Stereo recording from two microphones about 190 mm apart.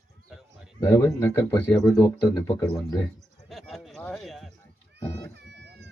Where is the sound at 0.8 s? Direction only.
10° left (ahead or behind).